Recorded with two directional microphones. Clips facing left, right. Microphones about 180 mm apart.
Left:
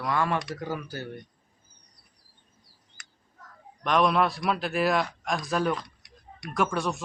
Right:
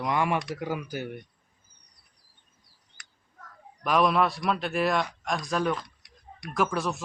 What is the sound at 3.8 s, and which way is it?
A man's voice, 5° right (ahead or behind).